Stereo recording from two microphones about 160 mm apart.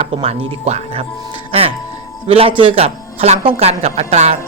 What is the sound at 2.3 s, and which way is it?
Speech, 35° right (ahead or behind).